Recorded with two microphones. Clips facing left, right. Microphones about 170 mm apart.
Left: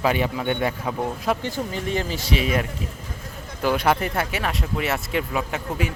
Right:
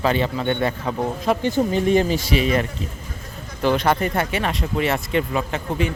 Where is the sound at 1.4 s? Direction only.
20° right (ahead or behind).